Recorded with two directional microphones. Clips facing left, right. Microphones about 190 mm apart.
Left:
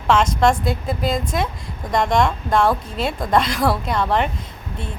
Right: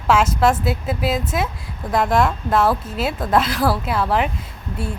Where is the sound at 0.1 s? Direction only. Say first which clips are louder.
Even; 5° right (ahead or behind).